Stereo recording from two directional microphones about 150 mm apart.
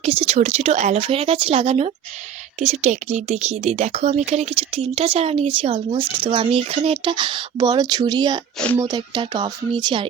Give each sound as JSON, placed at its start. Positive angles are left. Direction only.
{"t": 0.0, "sound": "speech", "side_deg": -40}